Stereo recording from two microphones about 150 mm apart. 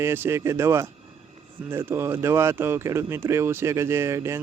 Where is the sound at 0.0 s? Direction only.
15° right (ahead or behind).